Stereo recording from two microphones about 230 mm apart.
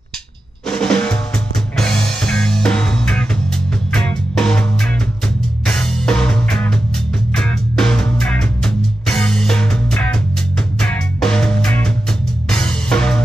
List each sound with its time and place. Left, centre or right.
0.7 s music: centre